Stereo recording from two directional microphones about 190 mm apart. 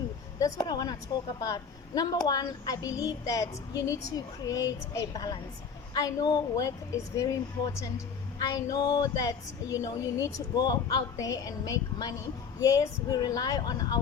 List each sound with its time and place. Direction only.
0.3 s a woman's voice: 20° left (ahead or behind)